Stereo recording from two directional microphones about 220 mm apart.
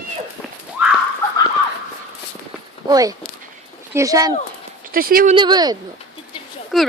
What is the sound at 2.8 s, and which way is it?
Speech, 15° right (ahead or behind).